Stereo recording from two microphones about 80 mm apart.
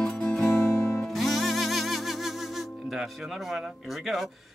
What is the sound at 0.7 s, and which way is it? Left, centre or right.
Music, left.